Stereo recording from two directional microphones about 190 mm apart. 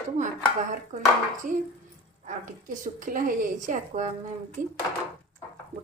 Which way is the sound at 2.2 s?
45° right (ahead or behind).